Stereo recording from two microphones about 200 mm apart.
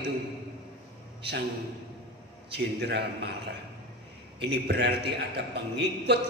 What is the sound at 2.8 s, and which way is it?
Speech, 55° right (ahead or behind).